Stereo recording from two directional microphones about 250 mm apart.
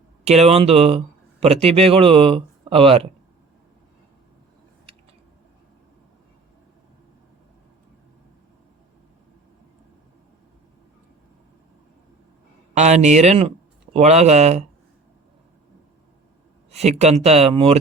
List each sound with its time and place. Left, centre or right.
0.3 s speech: right
12.7 s speech: right
16.7 s speech: right